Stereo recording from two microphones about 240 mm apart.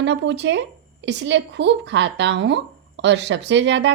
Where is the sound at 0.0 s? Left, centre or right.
Right.